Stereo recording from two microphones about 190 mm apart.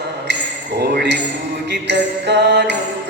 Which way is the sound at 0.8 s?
60° right (ahead or behind).